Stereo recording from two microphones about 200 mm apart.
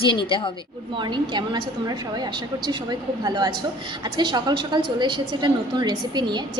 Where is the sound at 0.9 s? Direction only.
25° right (ahead or behind).